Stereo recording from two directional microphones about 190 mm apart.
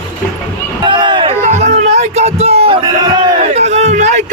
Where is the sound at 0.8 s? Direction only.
25° right (ahead or behind).